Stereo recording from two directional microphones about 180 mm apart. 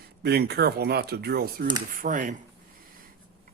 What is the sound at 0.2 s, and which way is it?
Speech, 60° right (ahead or behind).